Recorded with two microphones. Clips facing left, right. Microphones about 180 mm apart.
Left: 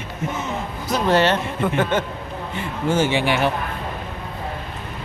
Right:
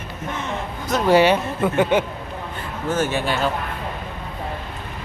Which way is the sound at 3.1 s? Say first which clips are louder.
Left 3 dB; 90° left.